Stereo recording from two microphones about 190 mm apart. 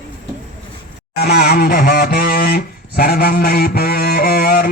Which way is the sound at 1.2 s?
55° left (ahead or behind).